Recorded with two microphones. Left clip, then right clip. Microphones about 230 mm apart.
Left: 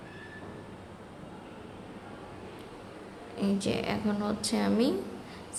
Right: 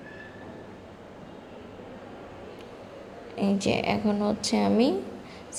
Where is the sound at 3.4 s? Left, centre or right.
Centre.